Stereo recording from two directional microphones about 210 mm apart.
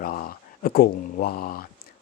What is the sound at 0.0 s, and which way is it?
Speech, 45° left (ahead or behind).